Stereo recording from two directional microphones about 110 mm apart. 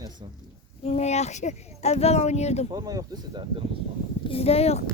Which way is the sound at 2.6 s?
35° right (ahead or behind).